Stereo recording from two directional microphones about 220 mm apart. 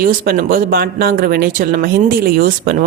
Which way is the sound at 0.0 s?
40° right (ahead or behind).